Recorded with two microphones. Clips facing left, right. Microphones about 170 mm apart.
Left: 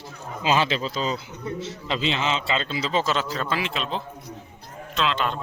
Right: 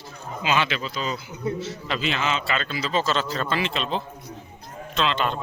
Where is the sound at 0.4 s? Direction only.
35° left (ahead or behind).